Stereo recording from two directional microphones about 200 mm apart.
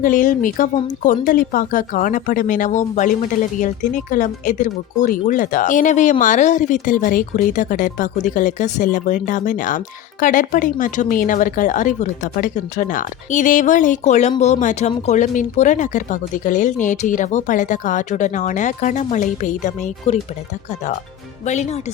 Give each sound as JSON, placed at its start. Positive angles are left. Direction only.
{"t": 0.0, "sound": "speech", "side_deg": 40}
{"t": 21.4, "sound": "speech", "side_deg": 35}